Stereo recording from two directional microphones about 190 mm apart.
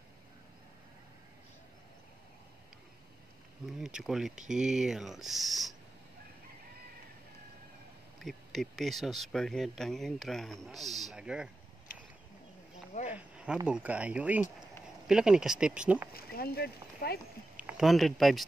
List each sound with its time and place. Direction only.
3.7 s speech: centre (ahead or behind)
8.2 s speech: centre (ahead or behind)
12.9 s speech: 35° left (ahead or behind)
13.7 s speech: 5° right (ahead or behind)
16.1 s speech: 55° left (ahead or behind)
17.6 s speech: 5° right (ahead or behind)